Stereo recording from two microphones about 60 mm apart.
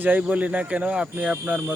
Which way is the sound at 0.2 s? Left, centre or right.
Right.